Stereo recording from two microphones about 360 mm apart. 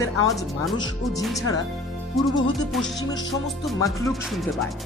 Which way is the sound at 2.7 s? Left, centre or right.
Centre.